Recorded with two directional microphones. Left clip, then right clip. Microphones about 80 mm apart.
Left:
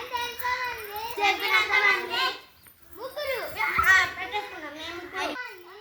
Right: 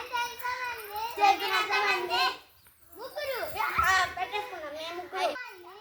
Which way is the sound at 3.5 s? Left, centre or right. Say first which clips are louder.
Left 5 dB; right.